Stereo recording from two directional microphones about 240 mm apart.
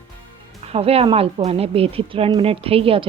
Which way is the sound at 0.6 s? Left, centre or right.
Right.